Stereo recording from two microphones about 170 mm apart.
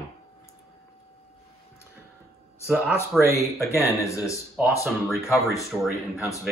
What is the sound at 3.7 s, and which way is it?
Speech, 15° left (ahead or behind).